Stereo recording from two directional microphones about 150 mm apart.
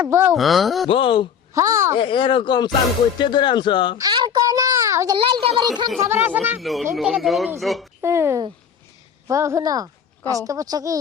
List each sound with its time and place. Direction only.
0.0 s speech: 15° right (ahead or behind)
0.3 s speech: centre (ahead or behind)
0.9 s speech: 35° left (ahead or behind)
1.5 s a woman's voice: 20° right (ahead or behind)
2.0 s speech: 35° left (ahead or behind)
3.9 s a sound: 25° right (ahead or behind)
5.1 s a woman's voice: 35° right (ahead or behind)
6.0 s speech: 15° right (ahead or behind)
6.6 s speech: centre (ahead or behind)
8.0 s a woman's voice: 15° right (ahead or behind)